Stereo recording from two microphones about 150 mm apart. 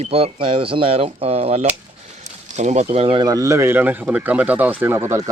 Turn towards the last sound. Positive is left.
turn(degrees=-20)  # may be behind; listen again after turning